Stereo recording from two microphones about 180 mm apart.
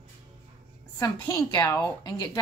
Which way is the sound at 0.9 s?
20° left (ahead or behind).